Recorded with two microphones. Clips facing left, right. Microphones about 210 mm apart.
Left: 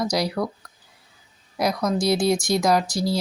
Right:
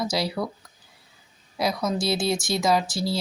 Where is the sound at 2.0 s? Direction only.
15° left (ahead or behind).